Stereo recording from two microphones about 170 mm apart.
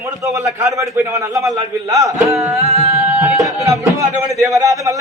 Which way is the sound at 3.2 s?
20° right (ahead or behind).